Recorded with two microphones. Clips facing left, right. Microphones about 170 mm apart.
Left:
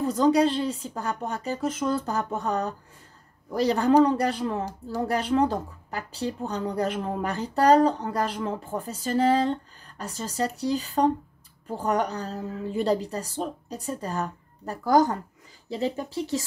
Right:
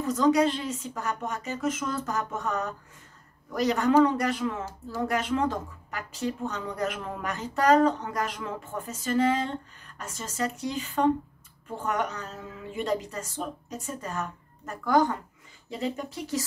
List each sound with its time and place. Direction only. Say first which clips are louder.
0.0 s a woman's voice: left 2 dB; 30° left (ahead or behind)